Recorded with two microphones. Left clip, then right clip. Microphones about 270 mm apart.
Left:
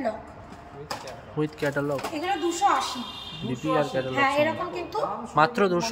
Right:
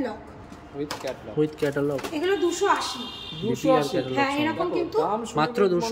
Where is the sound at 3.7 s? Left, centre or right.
Centre.